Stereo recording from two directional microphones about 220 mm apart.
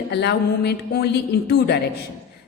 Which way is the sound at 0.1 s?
50° left (ahead or behind).